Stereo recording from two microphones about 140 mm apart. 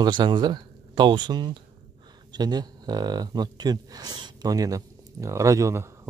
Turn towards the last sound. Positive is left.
turn(degrees=-20)  # may be behind; listen again after turning